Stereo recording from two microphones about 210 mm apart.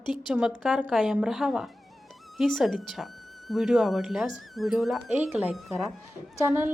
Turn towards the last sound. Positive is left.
turn(degrees=-10)  # may be behind; listen again after turning